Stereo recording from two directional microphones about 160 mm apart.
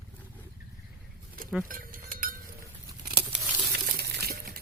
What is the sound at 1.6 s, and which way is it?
Cutlery, 60° right (ahead or behind).